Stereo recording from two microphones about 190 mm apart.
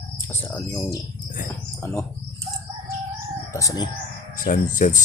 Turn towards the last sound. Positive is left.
turn(degrees=40)  # may be behind; listen again after turning